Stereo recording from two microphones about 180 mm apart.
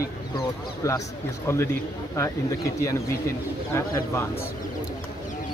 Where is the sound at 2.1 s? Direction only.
15° left (ahead or behind).